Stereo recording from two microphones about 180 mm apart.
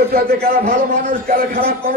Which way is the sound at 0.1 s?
60° right (ahead or behind).